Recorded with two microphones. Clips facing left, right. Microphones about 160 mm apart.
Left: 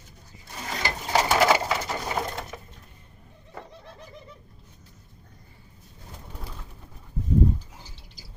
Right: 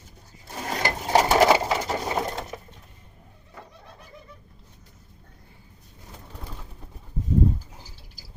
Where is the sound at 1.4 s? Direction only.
30° right (ahead or behind).